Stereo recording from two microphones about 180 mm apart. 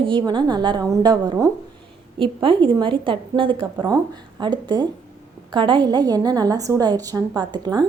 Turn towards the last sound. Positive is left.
turn(degrees=-25)  # may be behind; listen again after turning